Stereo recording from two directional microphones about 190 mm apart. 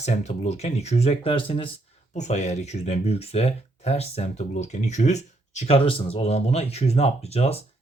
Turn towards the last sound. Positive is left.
turn(degrees=35)  # may be behind; listen again after turning